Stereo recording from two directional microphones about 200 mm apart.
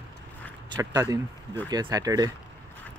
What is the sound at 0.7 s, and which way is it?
Speech, 15° right (ahead or behind).